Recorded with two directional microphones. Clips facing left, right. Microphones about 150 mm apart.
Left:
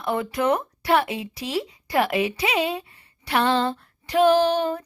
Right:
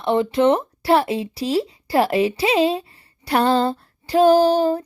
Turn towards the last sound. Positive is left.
turn(degrees=-35)  # may be behind; listen again after turning